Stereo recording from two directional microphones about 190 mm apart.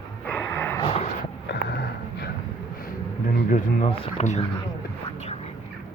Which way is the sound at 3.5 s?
40° left (ahead or behind).